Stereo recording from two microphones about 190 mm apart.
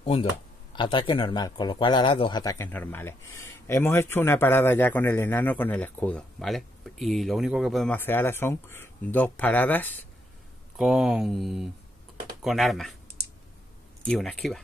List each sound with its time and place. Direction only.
0.0 s speech: 30° left (ahead or behind); by 9.9 s 10° left (ahead or behind)
10.8 s speech: centre (ahead or behind)
14.0 s speech: centre (ahead or behind)